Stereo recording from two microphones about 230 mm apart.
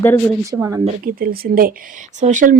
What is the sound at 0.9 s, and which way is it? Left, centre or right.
Speech, right.